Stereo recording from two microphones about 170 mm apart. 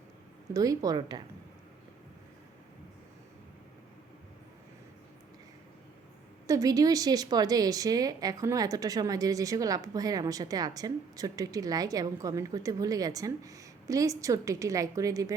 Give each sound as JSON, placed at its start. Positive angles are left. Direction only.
{"t": 0.5, "sound": "a woman's voice", "side_deg": -20}
{"t": 6.5, "sound": "a woman's voice", "side_deg": -20}